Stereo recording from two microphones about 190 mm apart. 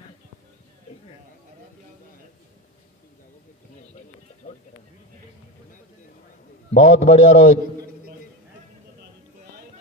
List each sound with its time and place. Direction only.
6.7 s a man's voice: 30° left (ahead or behind)